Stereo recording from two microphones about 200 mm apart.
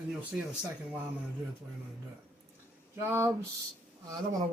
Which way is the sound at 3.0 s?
10° right (ahead or behind).